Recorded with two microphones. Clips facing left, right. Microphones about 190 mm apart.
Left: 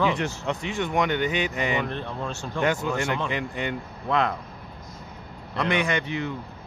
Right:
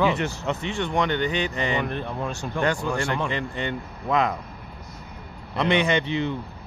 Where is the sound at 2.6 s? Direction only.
20° left (ahead or behind).